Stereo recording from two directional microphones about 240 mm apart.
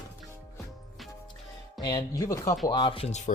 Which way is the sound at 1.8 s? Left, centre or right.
Centre.